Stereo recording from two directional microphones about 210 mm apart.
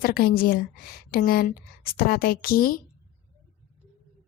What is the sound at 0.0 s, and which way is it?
A woman's voice, 45° left (ahead or behind).